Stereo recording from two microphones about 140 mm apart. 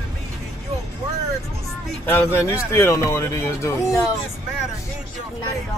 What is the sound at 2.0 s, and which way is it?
Speech, 20° left (ahead or behind).